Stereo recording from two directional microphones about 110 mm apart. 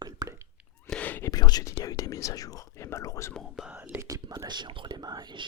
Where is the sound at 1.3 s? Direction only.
35° left (ahead or behind).